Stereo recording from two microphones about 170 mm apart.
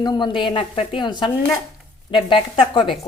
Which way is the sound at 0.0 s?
25° left (ahead or behind).